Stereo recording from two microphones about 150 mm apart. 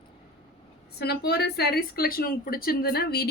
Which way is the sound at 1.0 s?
90° left.